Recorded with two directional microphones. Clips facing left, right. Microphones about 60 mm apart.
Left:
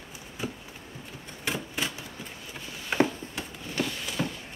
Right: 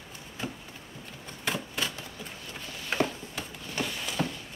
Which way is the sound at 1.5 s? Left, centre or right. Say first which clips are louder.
Even; centre.